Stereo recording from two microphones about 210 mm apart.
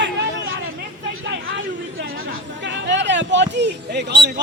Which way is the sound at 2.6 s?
55° right (ahead or behind).